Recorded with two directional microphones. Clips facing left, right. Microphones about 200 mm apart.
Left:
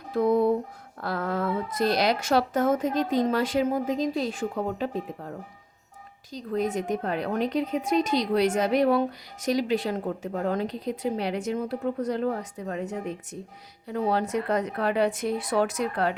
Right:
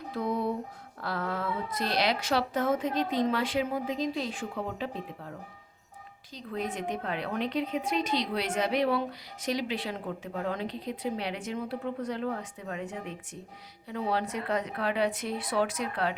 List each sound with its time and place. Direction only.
0.1 s a sound: 50° left (ahead or behind)
1.0 s a woman's voice: 45° left (ahead or behind)
6.3 s a woman's voice: 45° left (ahead or behind)